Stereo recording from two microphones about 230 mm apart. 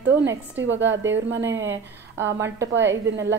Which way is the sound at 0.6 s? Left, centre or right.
Right.